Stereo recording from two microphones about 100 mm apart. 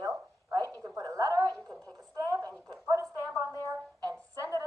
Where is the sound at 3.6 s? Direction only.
30° right (ahead or behind).